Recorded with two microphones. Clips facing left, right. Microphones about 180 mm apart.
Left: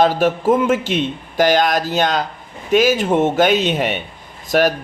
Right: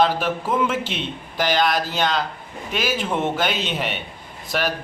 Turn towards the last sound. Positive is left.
turn(degrees=45)  # may be behind; listen again after turning